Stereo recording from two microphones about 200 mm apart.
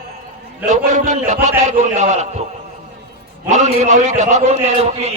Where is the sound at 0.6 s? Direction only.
40° right (ahead or behind).